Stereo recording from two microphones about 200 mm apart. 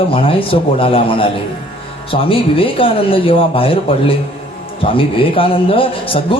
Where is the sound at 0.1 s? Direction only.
25° left (ahead or behind).